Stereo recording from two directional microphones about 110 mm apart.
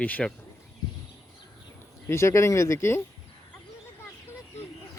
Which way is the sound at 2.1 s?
25° left (ahead or behind).